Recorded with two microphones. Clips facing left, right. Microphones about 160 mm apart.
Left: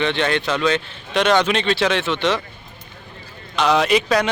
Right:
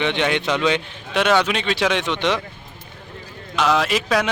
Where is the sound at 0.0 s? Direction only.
15° right (ahead or behind).